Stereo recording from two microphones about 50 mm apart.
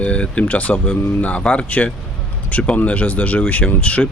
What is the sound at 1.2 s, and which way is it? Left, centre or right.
Speech, left.